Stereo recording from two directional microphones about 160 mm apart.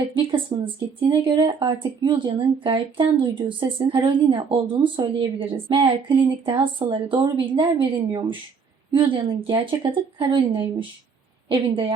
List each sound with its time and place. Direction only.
0.1 s a woman's voice: 35° right (ahead or behind)